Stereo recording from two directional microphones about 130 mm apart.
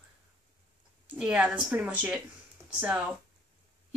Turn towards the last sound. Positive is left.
turn(degrees=-10)  # may be behind; listen again after turning